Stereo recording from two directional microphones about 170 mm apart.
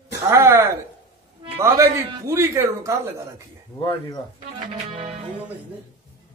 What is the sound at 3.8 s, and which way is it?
Speech, 30° left (ahead or behind).